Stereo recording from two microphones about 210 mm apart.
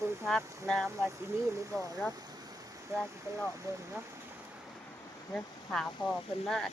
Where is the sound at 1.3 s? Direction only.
10° right (ahead or behind).